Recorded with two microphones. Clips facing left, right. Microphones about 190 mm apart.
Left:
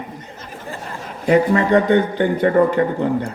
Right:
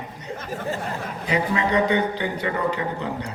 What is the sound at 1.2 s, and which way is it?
A man's voice, 50° left (ahead or behind).